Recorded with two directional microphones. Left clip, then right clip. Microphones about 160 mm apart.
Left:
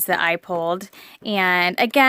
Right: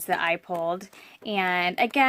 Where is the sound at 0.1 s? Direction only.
55° left (ahead or behind).